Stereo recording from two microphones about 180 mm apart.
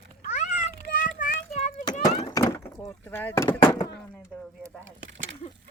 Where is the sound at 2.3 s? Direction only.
20° left (ahead or behind).